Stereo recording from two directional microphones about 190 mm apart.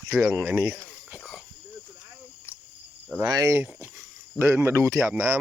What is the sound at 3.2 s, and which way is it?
Speech, 20° right (ahead or behind).